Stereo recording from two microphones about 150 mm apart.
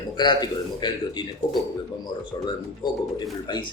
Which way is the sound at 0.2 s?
30° left (ahead or behind).